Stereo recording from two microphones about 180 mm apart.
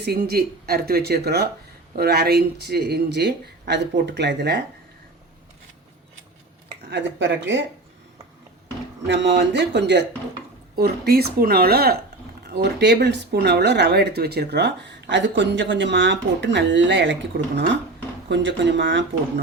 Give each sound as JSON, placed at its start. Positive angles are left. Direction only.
{"t": 0.0, "sound": "speech", "side_deg": -60}
{"t": 6.9, "sound": "speech", "side_deg": -90}
{"t": 9.0, "sound": "speech", "side_deg": -80}
{"t": 10.8, "sound": "speech", "side_deg": -60}